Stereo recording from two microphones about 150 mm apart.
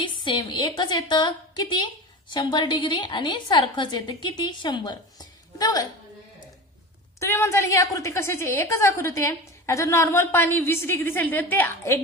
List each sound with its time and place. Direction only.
0.0 s a woman's voice: 30° left (ahead or behind)
7.2 s a woman's voice: 15° left (ahead or behind)